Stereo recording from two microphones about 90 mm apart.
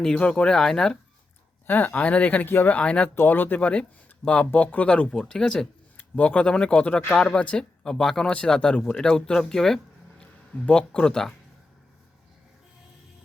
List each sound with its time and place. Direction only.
0.0 s speech: 10° left (ahead or behind)
1.6 s speech: 20° left (ahead or behind)